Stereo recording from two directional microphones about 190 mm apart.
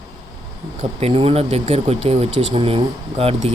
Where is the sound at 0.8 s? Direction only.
35° right (ahead or behind).